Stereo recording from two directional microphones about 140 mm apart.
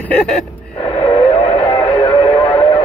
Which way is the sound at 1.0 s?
40° left (ahead or behind).